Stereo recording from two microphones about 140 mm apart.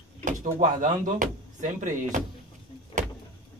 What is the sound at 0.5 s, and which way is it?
Speech, 70° right (ahead or behind).